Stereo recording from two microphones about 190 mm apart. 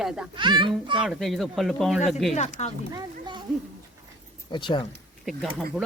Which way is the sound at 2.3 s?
35° left (ahead or behind).